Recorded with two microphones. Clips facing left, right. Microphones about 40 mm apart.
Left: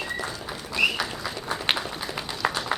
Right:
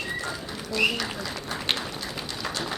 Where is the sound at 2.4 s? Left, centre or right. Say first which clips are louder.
Left 7 dB; left.